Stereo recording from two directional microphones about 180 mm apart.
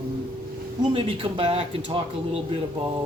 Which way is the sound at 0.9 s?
30° right (ahead or behind).